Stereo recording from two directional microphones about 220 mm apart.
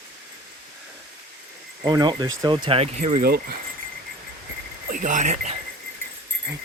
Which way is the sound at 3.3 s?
45° right (ahead or behind).